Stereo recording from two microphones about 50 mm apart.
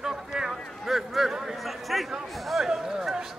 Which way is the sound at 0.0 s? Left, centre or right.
Centre.